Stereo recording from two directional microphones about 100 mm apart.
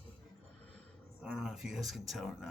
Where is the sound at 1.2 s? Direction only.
5° right (ahead or behind).